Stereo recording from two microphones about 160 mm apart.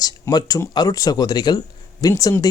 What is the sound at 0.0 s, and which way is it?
Speech, 25° left (ahead or behind).